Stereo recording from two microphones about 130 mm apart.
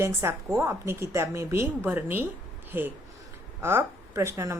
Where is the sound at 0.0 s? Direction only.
20° right (ahead or behind).